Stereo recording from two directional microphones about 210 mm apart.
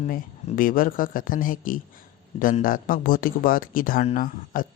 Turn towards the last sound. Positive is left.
turn(degrees=40)  # may be behind; listen again after turning